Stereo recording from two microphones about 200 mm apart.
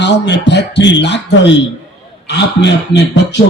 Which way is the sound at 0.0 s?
60° left (ahead or behind).